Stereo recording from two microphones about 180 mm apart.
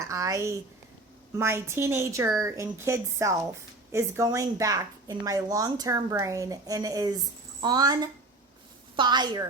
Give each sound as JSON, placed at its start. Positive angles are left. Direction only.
{"t": 0.0, "sound": "a woman's voice", "side_deg": -20}